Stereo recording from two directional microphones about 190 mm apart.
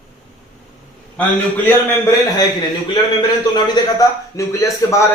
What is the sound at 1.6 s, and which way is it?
Speech, 10° left (ahead or behind).